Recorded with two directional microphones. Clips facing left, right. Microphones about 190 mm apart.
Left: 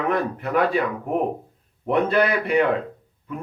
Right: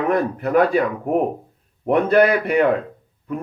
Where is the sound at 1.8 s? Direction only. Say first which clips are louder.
Right 5 dB; 50° right (ahead or behind).